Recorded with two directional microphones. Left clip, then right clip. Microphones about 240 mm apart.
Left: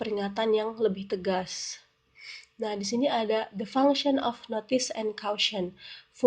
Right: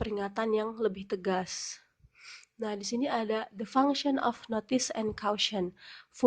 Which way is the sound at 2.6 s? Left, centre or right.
Right.